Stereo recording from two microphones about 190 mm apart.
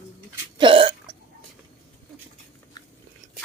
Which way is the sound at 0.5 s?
25° right (ahead or behind).